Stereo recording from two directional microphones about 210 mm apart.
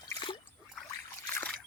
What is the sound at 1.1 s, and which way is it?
Trickle, 10° left (ahead or behind).